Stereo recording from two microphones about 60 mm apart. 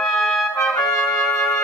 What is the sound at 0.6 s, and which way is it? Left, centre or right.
Trumpet, left.